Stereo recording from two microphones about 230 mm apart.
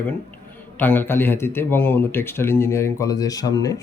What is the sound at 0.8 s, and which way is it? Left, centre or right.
A man's voice, centre.